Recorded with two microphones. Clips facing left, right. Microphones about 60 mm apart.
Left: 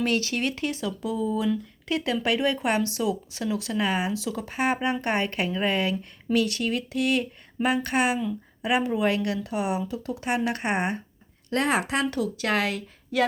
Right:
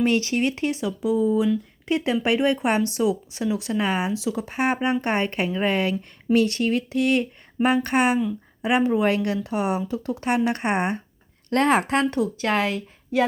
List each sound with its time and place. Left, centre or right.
0.0 s speech: right
10.2 s speech: right
11.4 s a woman's voice: right
12.1 s speech: right